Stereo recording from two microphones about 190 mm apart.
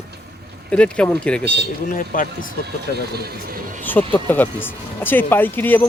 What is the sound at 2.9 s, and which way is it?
Speech, 55° right (ahead or behind).